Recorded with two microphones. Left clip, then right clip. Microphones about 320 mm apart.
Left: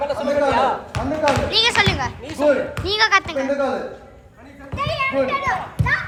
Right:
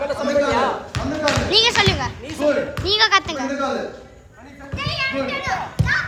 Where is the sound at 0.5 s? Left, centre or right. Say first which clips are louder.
Left 1 dB; centre.